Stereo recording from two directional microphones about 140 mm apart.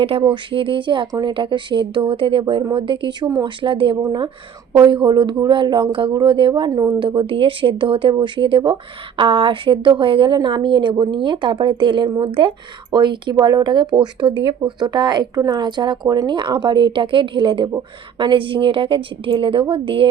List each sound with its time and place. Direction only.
0.0 s speech: 40° right (ahead or behind)